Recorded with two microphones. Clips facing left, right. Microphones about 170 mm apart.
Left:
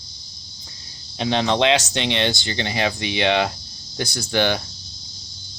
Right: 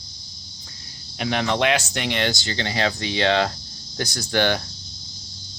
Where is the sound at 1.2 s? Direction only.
25° left (ahead or behind).